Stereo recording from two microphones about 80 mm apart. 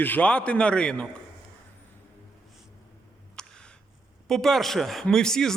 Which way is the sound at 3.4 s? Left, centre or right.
Centre.